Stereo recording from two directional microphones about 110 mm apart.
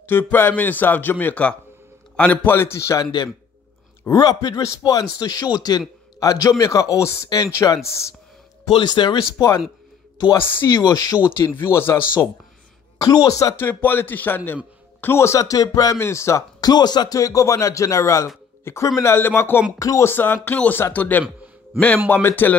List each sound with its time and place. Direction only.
0.0 s a man's voice: 20° left (ahead or behind)
4.1 s a man's voice: 35° left (ahead or behind)
8.7 s speech: 45° left (ahead or behind)
10.5 s speech: 20° left (ahead or behind)
10.8 s a man's voice: 35° left (ahead or behind)
11.5 s speech: 20° left (ahead or behind)
13.0 s a man's voice: 35° left (ahead or behind)
13.8 s a man's voice: 15° left (ahead or behind)